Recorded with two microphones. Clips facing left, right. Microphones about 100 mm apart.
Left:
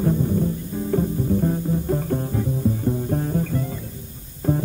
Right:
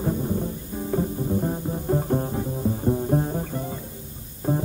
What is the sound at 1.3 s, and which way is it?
Music, 25° right (ahead or behind).